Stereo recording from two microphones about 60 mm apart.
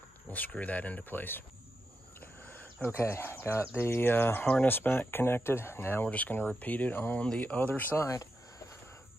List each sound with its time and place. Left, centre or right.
0.3 s speech: left
2.1 s cricket: left
3.0 s speech: left
6.0 s speech: left
7.2 s speech: left
8.1 s cricket: left